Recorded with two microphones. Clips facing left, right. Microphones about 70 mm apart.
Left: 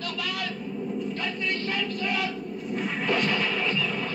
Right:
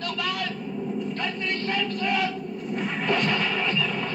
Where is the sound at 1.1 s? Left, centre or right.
Right.